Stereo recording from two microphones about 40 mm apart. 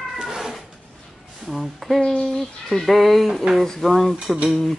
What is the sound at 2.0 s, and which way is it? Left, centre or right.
Speech, centre.